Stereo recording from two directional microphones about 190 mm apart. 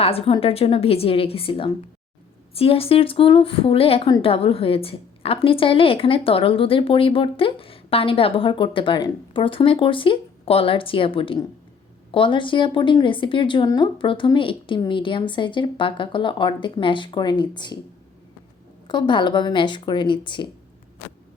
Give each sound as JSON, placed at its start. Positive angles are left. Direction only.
{"t": 0.0, "sound": "a woman's voice", "side_deg": 30}
{"t": 18.9, "sound": "a woman's voice", "side_deg": 25}